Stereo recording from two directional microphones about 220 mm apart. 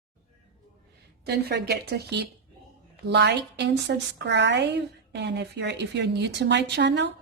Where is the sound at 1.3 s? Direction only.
45° right (ahead or behind).